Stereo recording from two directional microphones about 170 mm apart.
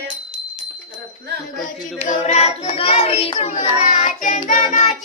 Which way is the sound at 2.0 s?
40° left (ahead or behind).